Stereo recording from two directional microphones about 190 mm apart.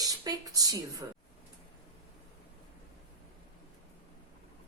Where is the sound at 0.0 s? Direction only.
20° right (ahead or behind).